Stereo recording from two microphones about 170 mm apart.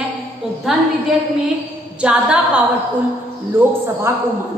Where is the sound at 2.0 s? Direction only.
5° right (ahead or behind).